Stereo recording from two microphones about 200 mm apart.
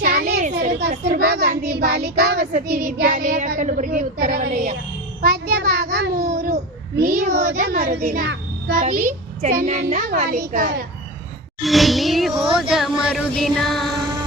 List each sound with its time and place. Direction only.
0.0 s children playing: 50° right (ahead or behind)
0.7 s a child's voice: 55° right (ahead or behind)
2.6 s child singing: 45° right (ahead or behind)
5.2 s a child's voice: 45° right (ahead or behind)
8.0 s a child's voice: 40° right (ahead or behind)
8.3 s child singing: 60° right (ahead or behind)
8.8 s a child's voice: 40° right (ahead or behind)
11.6 s speech: centre (ahead or behind)